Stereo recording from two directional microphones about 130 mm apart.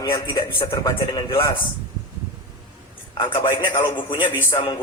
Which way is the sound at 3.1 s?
35° left (ahead or behind).